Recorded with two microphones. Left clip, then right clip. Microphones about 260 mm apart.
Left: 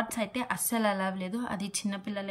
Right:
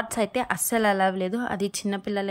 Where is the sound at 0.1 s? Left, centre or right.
Centre.